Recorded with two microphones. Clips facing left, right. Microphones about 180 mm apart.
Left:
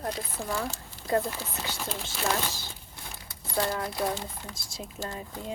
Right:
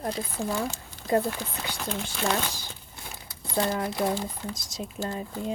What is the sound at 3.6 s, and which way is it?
Speech, 20° right (ahead or behind).